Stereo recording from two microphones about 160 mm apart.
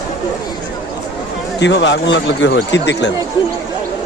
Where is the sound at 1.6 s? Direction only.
90° left.